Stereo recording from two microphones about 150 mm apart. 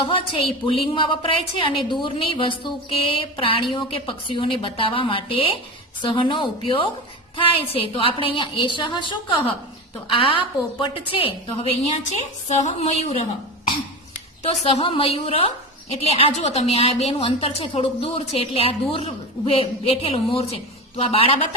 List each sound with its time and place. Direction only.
0.0 s a woman's voice: 35° left (ahead or behind)
12.5 s a woman's voice: 50° left (ahead or behind)
14.4 s a woman's voice: 40° left (ahead or behind)